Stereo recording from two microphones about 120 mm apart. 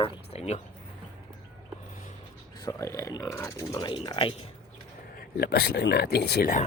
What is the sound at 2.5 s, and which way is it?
Speech, 30° left (ahead or behind).